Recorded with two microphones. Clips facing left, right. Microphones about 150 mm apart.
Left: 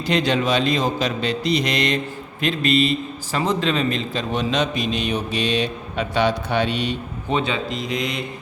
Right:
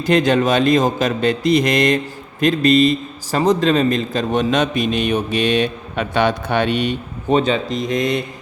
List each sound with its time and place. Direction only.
0.0 s a man's voice: 45° right (ahead or behind)